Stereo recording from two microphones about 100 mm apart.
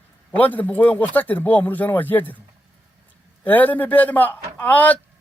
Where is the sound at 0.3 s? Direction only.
15° left (ahead or behind).